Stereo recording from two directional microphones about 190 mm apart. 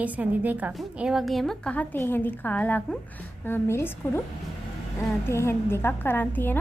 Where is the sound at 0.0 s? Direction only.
10° right (ahead or behind); by 4.2 s 10° left (ahead or behind).